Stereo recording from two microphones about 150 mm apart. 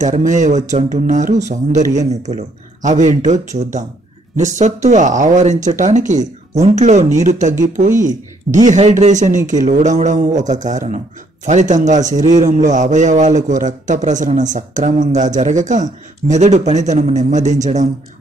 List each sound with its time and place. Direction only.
0.0 s a man's voice: 55° right (ahead or behind)